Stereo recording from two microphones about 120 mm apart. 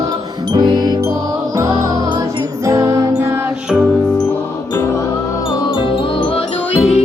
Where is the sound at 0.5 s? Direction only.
35° right (ahead or behind).